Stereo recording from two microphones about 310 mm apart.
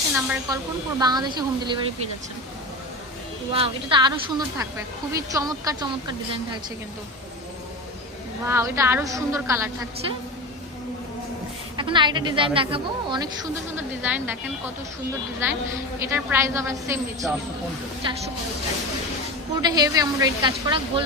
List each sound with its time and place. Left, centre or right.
0.1 s a woman's voice: centre
3.5 s a woman's voice: centre
8.4 s a woman's voice: centre
11.8 s a woman's voice: centre
16.0 s a woman's voice: centre
19.6 s a woman's voice: centre